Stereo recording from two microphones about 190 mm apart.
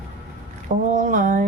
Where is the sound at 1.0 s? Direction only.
40° right (ahead or behind).